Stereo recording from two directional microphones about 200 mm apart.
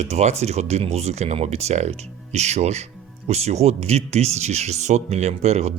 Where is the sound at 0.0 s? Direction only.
35° right (ahead or behind).